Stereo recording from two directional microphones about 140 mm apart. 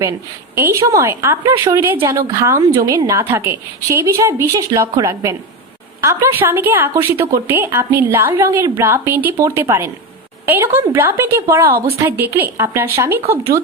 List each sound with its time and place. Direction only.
0.0 s a woman's voice: 20° right (ahead or behind)